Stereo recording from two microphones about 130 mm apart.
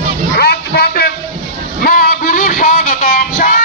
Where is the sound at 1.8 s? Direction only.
90° left.